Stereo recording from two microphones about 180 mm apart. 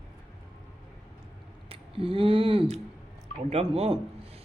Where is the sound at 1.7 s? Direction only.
30° right (ahead or behind).